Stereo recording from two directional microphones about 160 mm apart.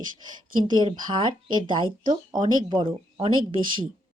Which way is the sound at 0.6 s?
30° right (ahead or behind).